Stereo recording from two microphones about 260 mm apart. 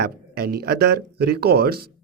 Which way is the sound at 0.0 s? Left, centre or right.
Right.